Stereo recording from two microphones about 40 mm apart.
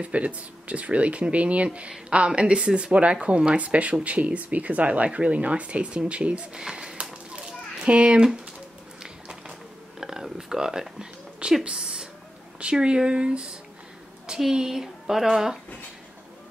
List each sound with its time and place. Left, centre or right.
0.0 s speech: right
6.5 s a sound: centre
12.7 s speech: right
14.5 s speech: centre